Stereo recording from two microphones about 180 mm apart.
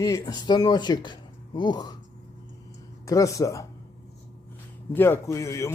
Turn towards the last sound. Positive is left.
turn(degrees=15)  # may be behind; listen again after turning